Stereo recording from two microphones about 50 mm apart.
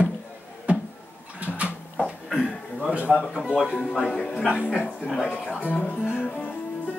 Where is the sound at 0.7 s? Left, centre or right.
Right.